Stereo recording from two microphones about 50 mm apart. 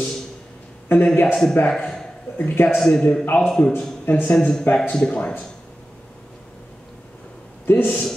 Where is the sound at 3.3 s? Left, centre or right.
Left.